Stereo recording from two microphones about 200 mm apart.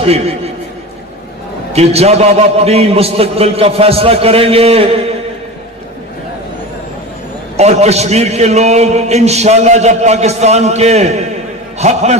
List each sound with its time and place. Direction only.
0.0 s a man's voice: 30° right (ahead or behind)
1.7 s a man's voice: 30° right (ahead or behind)
7.5 s a man's voice: 30° right (ahead or behind)